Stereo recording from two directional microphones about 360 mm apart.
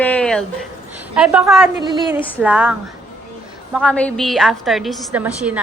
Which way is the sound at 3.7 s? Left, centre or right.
Centre.